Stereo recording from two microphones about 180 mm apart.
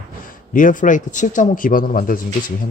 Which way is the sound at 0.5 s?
45° left (ahead or behind).